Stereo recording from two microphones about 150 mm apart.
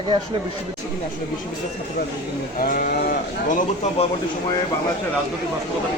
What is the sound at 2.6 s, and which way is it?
Speech, 75° left (ahead or behind).